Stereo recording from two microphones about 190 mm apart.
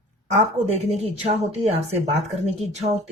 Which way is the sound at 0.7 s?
35° right (ahead or behind).